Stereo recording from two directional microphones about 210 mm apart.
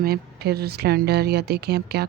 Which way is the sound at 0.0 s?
45° right (ahead or behind).